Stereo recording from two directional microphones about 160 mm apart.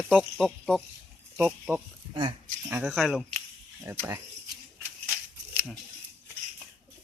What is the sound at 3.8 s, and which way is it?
Speech, 15° right (ahead or behind).